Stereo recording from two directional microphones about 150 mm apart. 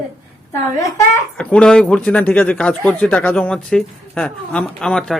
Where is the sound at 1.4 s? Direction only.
5° left (ahead or behind).